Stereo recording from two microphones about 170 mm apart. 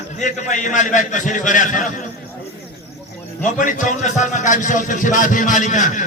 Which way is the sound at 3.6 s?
50° left (ahead or behind).